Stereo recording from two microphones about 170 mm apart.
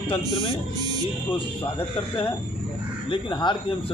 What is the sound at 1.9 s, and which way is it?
A man's voice, 30° left (ahead or behind).